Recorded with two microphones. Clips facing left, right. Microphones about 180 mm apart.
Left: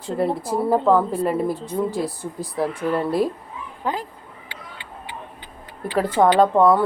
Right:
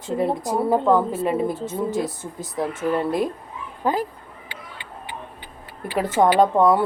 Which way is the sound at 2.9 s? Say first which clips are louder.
Left 1 dB; centre (ahead or behind).